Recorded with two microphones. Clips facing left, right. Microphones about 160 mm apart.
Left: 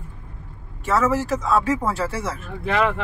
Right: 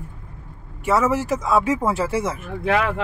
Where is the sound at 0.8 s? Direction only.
15° right (ahead or behind).